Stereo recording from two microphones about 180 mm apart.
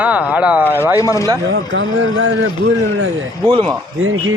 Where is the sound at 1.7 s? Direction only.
90° right.